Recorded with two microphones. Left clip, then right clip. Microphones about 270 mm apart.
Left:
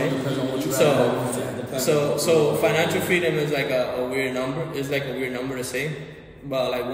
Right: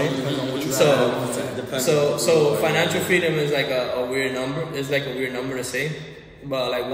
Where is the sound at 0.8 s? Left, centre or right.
Centre.